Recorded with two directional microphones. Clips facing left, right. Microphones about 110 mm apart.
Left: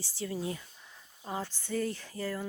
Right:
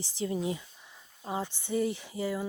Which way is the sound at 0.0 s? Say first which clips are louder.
Right 4 dB; 20° right (ahead or behind).